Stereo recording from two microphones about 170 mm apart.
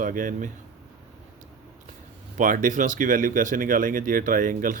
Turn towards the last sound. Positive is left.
turn(degrees=-50)  # may be behind; listen again after turning